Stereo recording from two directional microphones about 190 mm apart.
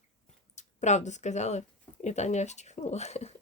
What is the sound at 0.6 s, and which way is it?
Speech, 40° left (ahead or behind).